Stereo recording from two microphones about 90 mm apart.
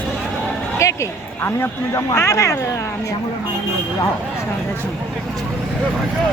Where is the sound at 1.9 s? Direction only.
30° left (ahead or behind).